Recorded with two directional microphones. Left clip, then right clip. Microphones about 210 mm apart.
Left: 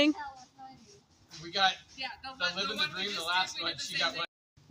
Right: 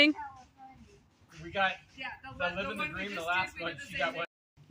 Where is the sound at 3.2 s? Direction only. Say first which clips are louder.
Even; 35° right (ahead or behind).